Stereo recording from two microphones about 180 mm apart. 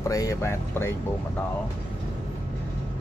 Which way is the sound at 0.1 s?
20° left (ahead or behind).